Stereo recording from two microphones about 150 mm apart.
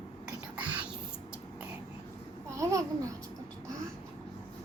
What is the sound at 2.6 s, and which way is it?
Speech, 20° right (ahead or behind).